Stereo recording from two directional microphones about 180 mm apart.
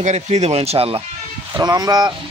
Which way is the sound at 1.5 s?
20° right (ahead or behind).